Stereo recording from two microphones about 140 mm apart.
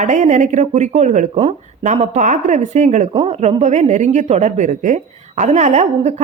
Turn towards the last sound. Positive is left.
turn(degrees=-55)  # may be behind; listen again after turning